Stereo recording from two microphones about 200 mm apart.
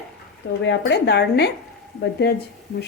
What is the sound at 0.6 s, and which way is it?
Speech, 60° left (ahead or behind).